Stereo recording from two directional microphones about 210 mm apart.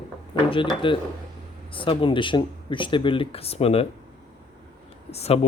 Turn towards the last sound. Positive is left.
turn(degrees=30)  # may be behind; listen again after turning